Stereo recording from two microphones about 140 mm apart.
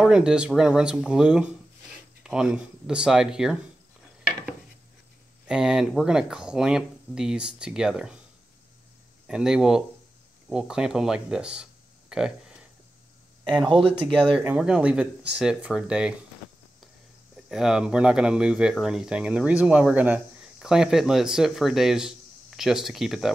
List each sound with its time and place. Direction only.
0.0 s speech: 5° right (ahead or behind)
5.5 s speech: 5° right (ahead or behind)
9.3 s speech: 5° right (ahead or behind)
13.7 s speech: 35° right (ahead or behind)
14.4 s speech: 10° right (ahead or behind)
17.5 s speech: 5° right (ahead or behind)